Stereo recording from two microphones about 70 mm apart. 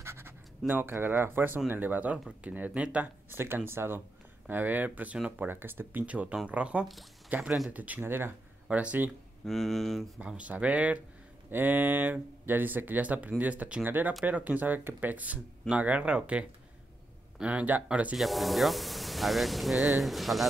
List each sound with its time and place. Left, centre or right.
0.0 s scratch: right
0.7 s speech: right
3.3 s speech: right
5.5 s speech: right
6.0 s speech: centre
8.0 s speech: right
8.6 s speech: centre
9.5 s speech: centre
10.2 s speech: centre
18.1 s speech: centre